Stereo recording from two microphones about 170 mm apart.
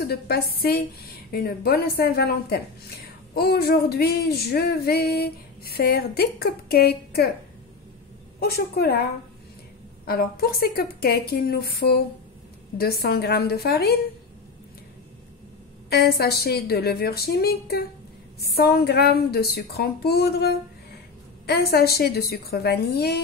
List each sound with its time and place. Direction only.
0.0 s female singing: 70° left (ahead or behind)
8.4 s female singing: 65° left (ahead or behind)
10.0 s a woman's voice: 65° left (ahead or behind)
12.7 s female singing: 65° left (ahead or behind)
15.9 s female singing: 70° left (ahead or behind)